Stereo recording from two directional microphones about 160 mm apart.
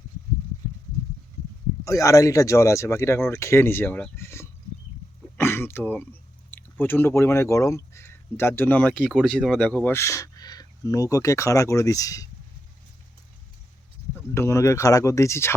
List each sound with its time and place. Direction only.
1.8 s speech: 20° left (ahead or behind)
9.0 s speech: centre (ahead or behind); by 12.3 s 20° left (ahead or behind)
14.3 s speech: 20° left (ahead or behind)